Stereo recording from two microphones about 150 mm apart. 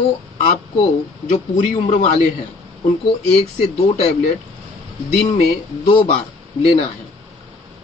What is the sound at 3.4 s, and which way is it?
Speech, 45° left (ahead or behind).